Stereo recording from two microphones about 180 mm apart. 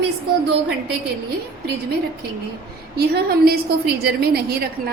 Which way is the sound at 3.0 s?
60° right (ahead or behind).